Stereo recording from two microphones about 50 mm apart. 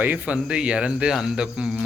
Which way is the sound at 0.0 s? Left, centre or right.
Right.